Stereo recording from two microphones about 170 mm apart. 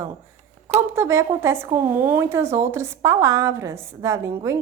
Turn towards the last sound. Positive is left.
turn(degrees=-15)  # may be behind; listen again after turning